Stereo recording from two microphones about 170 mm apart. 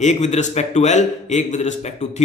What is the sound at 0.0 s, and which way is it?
A man's voice, 40° left (ahead or behind).